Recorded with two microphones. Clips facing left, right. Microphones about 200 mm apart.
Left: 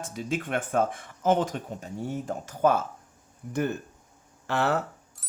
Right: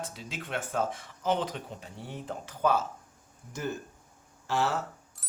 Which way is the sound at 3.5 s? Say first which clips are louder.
Left 6 dB; 60° left (ahead or behind).